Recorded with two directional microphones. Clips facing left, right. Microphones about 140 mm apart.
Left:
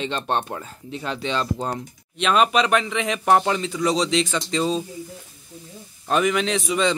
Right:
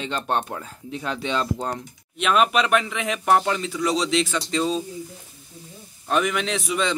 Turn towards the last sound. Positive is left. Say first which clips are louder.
# left 3 dB
turn(degrees=0)  # may be behind; listen again after turning